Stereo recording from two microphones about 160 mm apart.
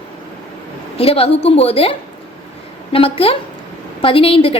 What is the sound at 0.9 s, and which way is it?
A woman's voice, 35° left (ahead or behind).